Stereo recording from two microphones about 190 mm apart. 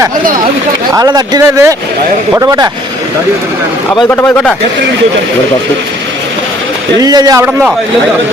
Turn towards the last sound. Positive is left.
turn(degrees=-5)  # may be behind; listen again after turning